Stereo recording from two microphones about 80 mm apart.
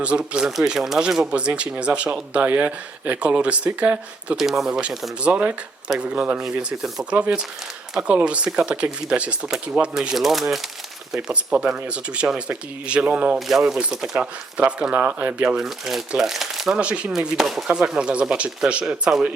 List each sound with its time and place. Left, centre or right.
0.0 s speech: centre
4.4 s speech: centre
5.2 s speech: centre
13.5 s speech: centre
15.5 s speech: centre
16.7 s speech: centre